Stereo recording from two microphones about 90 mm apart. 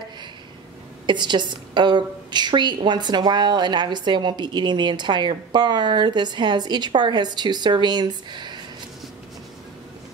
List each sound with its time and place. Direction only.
1.0 s a woman's voice: 55° right (ahead or behind)